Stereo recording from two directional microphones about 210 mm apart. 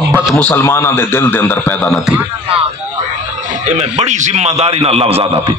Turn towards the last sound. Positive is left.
turn(degrees=-30)  # may be behind; listen again after turning